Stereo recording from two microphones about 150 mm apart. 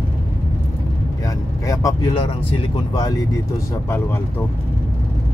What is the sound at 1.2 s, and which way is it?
Vehicle, 20° left (ahead or behind).